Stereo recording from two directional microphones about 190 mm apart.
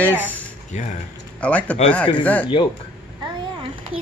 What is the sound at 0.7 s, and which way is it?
Speech, 40° left (ahead or behind).